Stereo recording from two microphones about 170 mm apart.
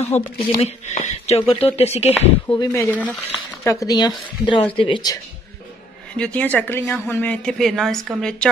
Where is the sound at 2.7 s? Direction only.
10° left (ahead or behind).